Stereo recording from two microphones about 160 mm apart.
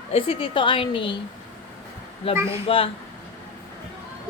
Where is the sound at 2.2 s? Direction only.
35° left (ahead or behind).